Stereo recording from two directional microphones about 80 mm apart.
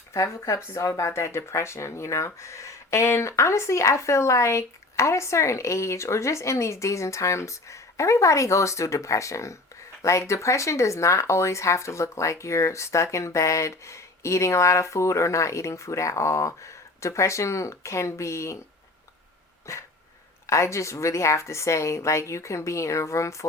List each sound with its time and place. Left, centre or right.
0.1 s speech: left
19.7 s speech: left